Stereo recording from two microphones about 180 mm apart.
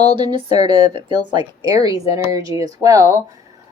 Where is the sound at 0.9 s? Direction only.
25° right (ahead or behind).